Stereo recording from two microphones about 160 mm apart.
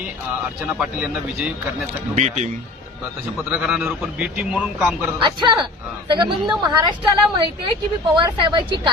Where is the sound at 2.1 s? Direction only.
45° right (ahead or behind).